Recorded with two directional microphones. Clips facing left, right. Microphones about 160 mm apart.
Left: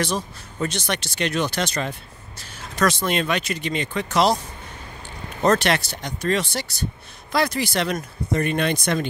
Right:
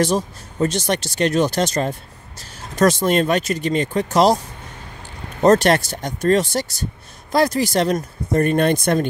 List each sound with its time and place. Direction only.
0.0 s speech: 40° right (ahead or behind)
5.4 s speech: 40° right (ahead or behind)